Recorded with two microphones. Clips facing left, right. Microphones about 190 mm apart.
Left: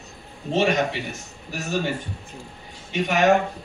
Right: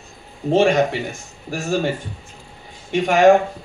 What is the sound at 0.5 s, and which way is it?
A man's voice, 50° right (ahead or behind).